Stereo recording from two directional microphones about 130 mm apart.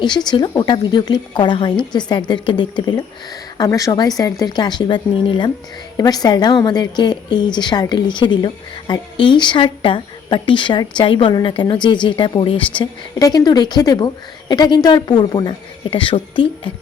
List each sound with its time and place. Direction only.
0.0 s a woman's voice: 35° left (ahead or behind)